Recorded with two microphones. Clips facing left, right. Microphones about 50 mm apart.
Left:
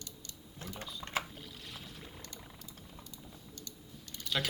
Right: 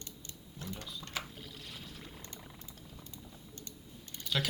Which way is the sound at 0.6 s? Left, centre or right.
Left.